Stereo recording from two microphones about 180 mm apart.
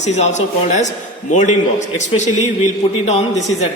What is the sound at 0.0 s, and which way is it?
A man's voice, 40° left (ahead or behind).